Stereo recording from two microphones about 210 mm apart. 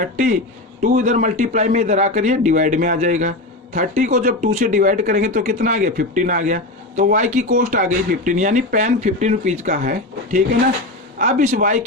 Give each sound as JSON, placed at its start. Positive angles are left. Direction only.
{"t": 0.0, "sound": "speech", "side_deg": -40}